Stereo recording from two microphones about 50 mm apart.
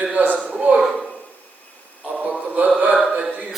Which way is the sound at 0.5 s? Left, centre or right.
Centre.